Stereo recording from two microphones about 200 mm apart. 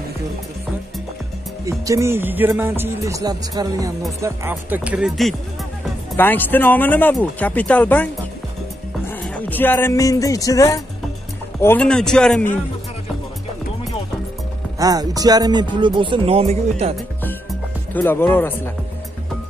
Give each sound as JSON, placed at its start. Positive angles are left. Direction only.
{"t": 1.7, "sound": "speech", "side_deg": -15}
{"t": 6.1, "sound": "a man's voice", "side_deg": 10}
{"t": 14.8, "sound": "speech", "side_deg": -20}
{"t": 16.9, "sound": "music", "side_deg": 5}